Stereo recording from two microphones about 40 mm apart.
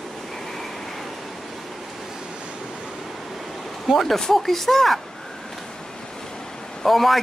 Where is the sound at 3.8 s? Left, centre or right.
Centre.